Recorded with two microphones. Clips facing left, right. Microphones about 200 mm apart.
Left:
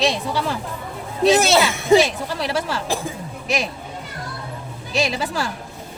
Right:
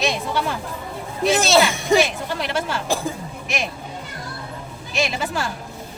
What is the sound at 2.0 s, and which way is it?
Speech, 30° left (ahead or behind).